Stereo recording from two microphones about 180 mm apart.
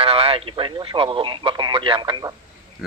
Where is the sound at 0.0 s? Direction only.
35° right (ahead or behind).